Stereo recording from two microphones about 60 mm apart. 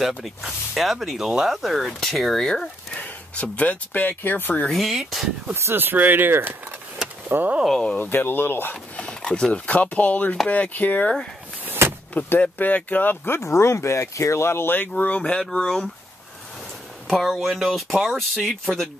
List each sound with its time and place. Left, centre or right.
0.2 s speech: centre
2.9 s speech: left
4.6 s speech: centre
5.5 s speech: right
8.0 s speech: left
8.9 s dog: centre
9.5 s speech: left
11.6 s door: right
12.1 s speech: left
13.4 s speech: left
14.8 s speech: left; by 15.9 s centre
17.1 s speech: centre